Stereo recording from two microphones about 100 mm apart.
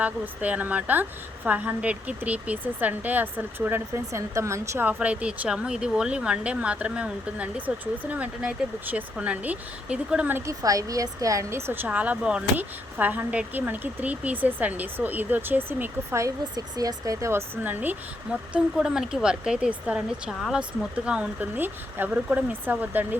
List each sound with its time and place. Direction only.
0.0 s speech: 15° right (ahead or behind)
4.9 s speech: 10° right (ahead or behind)
10.3 s speech: 30° right (ahead or behind); by 23.0 s 15° right (ahead or behind)